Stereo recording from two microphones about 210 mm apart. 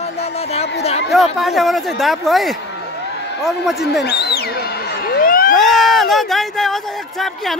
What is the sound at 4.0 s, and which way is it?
Speech, 50° left (ahead or behind).